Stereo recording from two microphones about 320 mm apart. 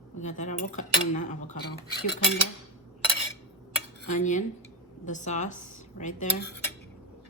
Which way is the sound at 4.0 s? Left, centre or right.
Left.